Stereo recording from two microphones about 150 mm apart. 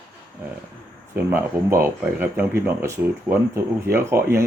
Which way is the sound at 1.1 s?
15° right (ahead or behind).